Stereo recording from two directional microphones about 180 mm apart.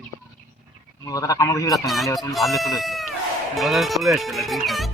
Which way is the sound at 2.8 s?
Centre (ahead or behind).